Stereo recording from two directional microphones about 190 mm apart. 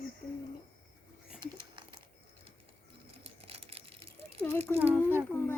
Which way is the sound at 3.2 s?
30° right (ahead or behind).